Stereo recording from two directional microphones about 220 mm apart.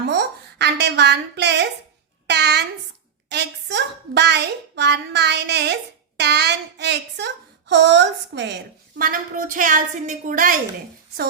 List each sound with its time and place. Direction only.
0.1 s a woman's voice: 50° right (ahead or behind)
9.0 s a woman's voice: 40° right (ahead or behind)